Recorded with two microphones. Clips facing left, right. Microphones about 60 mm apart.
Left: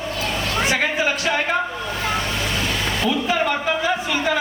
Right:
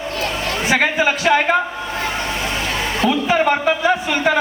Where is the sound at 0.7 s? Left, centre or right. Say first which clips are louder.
Right 4 dB; right.